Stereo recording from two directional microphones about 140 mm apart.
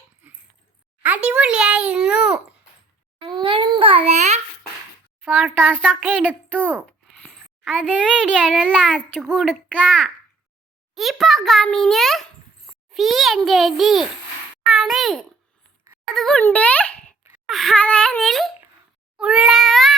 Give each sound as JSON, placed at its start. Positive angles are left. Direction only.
{"t": 1.0, "sound": "a sound", "side_deg": -10}
{"t": 3.2, "sound": "babbling", "side_deg": -35}
{"t": 5.2, "sound": "a child's voice", "side_deg": 0}
{"t": 7.8, "sound": "a child's voice", "side_deg": 5}
{"t": 19.1, "sound": "meow", "side_deg": -5}